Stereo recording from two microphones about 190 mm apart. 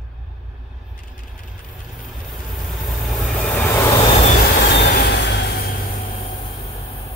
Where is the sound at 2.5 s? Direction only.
Centre (ahead or behind).